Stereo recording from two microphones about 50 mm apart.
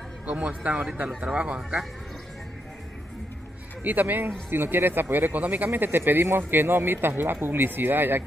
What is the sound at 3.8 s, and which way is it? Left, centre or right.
Speech, right.